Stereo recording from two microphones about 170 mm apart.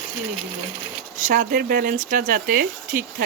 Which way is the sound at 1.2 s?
55° right (ahead or behind).